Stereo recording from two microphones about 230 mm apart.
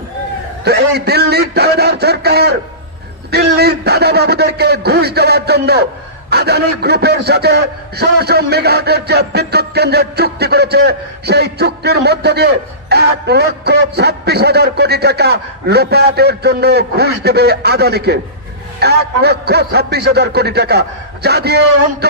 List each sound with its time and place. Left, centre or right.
0.7 s a man's voice: right